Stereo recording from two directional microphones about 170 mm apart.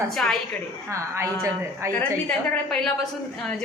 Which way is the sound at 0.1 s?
Centre (ahead or behind).